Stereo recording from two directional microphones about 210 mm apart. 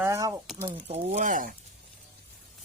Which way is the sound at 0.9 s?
30° right (ahead or behind).